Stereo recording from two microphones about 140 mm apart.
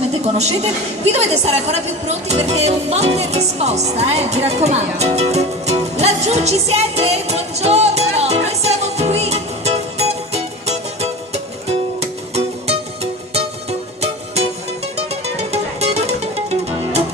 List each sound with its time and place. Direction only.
0.3 s a woman's voice: 50° right (ahead or behind)
11.9 s music: 50° right (ahead or behind)